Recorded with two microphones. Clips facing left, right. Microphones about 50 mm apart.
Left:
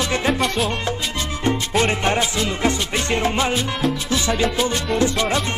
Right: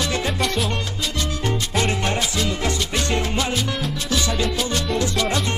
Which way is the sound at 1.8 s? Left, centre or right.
Left.